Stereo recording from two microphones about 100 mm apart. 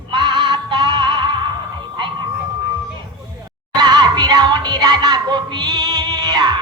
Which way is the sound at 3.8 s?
50° right (ahead or behind).